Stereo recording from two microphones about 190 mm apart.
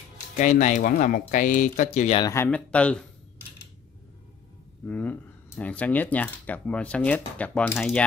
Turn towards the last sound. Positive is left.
turn(degrees=10)  # may be behind; listen again after turning